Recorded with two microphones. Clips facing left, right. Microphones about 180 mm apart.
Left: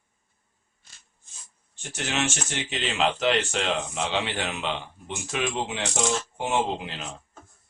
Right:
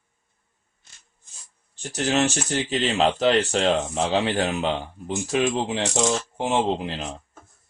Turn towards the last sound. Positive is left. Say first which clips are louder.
# right 4 dB
turn(degrees=-30)  # may be behind; listen again after turning